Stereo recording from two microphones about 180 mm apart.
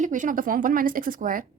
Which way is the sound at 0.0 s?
45° right (ahead or behind).